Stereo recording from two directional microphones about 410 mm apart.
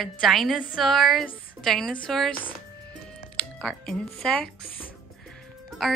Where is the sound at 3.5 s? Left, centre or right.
Centre.